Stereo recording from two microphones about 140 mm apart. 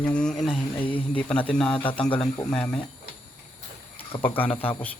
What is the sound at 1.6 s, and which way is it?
Speech, 40° left (ahead or behind).